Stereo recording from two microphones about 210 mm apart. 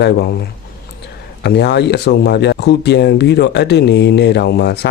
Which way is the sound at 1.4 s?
50° left (ahead or behind).